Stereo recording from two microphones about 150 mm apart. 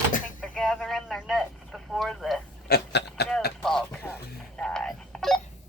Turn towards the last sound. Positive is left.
turn(degrees=5)  # may be behind; listen again after turning